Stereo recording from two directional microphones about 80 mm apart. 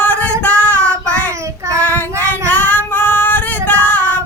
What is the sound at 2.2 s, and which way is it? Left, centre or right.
Female singing, left.